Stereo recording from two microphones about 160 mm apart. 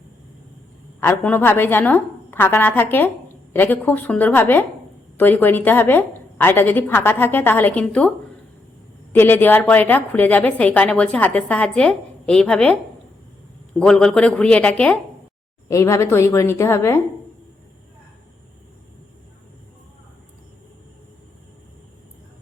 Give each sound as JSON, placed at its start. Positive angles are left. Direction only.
{"t": 1.0, "sound": "a woman's voice", "side_deg": 10}
{"t": 9.1, "sound": "a woman's voice", "side_deg": 10}
{"t": 13.7, "sound": "a woman's voice", "side_deg": 5}